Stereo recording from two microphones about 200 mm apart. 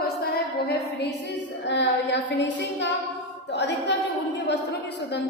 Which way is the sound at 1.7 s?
60° left (ahead or behind).